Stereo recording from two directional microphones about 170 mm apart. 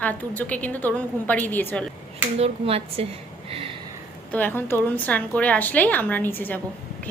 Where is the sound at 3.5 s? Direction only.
35° right (ahead or behind).